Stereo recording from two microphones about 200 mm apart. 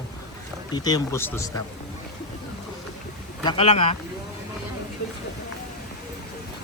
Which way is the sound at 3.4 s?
25° left (ahead or behind).